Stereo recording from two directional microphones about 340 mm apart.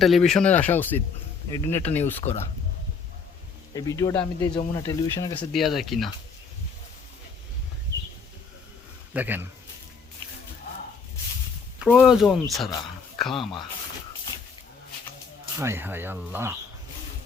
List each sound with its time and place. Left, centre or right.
0.0 s speech: centre
3.8 s speech: centre
9.1 s speech: centre
11.8 s speech: centre
15.5 s speech: centre